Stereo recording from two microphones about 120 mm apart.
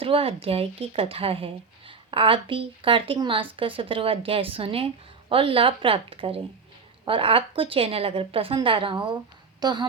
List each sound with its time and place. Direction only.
0.0 s a woman's voice: 50° right (ahead or behind); by 9.8 s 35° right (ahead or behind)